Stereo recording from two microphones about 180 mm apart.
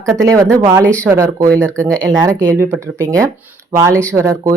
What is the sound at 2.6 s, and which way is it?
Speech, 15° right (ahead or behind).